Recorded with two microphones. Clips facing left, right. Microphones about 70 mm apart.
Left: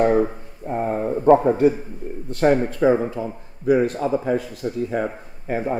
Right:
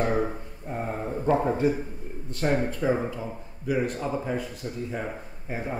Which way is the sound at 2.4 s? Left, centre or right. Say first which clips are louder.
Left 8 dB; left.